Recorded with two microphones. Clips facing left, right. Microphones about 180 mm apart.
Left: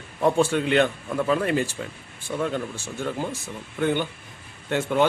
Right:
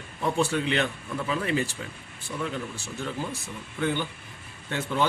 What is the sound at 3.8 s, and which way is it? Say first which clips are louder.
Speech: left 4 dB; 50° left (ahead or behind).